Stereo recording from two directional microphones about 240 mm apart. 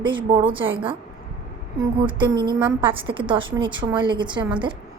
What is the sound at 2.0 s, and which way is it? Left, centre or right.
Speech, centre.